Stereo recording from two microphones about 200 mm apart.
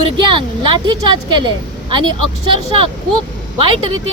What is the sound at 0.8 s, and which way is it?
Speech, 25° right (ahead or behind).